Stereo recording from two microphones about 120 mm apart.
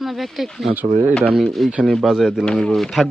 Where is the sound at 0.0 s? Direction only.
Centre (ahead or behind).